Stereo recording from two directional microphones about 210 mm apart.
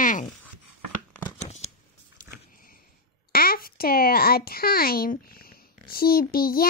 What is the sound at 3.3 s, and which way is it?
Speech, 45° left (ahead or behind).